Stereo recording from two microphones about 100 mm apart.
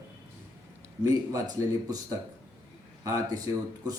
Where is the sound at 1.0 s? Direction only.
35° right (ahead or behind).